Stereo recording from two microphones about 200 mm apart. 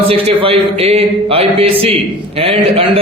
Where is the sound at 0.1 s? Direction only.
30° right (ahead or behind).